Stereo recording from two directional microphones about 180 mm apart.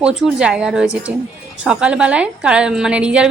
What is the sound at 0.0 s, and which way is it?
A woman's voice, centre (ahead or behind).